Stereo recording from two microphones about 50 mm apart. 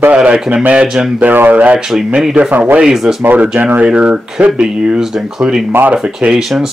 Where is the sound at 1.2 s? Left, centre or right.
Right.